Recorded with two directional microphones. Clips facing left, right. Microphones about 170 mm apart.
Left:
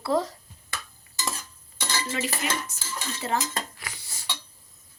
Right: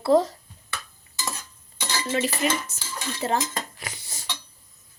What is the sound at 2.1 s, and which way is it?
Dishes, 30° right (ahead or behind).